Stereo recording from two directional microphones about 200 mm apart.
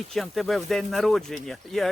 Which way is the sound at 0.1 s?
Centre (ahead or behind).